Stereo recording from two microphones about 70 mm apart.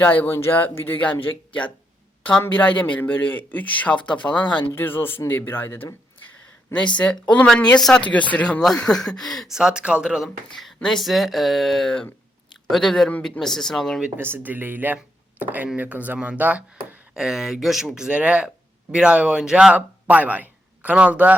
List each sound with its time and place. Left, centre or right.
0.0 s speech: left
2.5 s speech: left
4.7 s speech: left
6.7 s speech: centre
8.0 s speech: centre
8.6 s speech: centre
9.5 s speech: centre
10.2 s speech: centre
14.2 s speech: right
17.2 s speech: centre
19.7 s a man's voice: right